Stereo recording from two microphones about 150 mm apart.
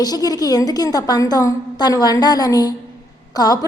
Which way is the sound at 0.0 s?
25° left (ahead or behind).